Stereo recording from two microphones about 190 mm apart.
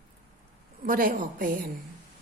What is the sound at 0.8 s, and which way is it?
Speech, 50° right (ahead or behind).